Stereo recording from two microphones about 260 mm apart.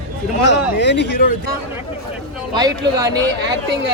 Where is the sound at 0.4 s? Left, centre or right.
Left.